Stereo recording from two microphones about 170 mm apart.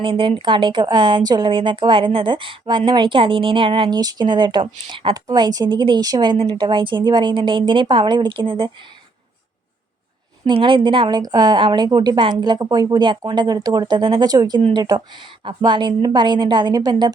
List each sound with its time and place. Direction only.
0.0 s speech: 30° right (ahead or behind)
10.4 s speech: 30° right (ahead or behind)